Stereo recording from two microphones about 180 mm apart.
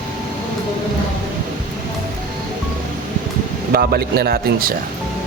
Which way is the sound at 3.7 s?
60° right (ahead or behind).